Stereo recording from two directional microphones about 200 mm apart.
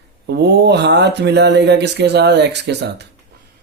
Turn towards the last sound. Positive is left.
turn(degrees=-55)  # may be behind; listen again after turning